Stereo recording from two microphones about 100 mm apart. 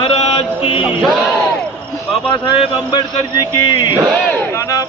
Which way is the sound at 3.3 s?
40° left (ahead or behind).